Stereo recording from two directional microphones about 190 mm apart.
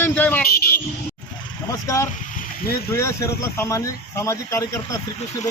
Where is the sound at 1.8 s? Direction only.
15° left (ahead or behind).